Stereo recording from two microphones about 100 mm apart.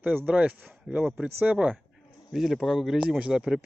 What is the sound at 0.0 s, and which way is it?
Speech, 15° right (ahead or behind).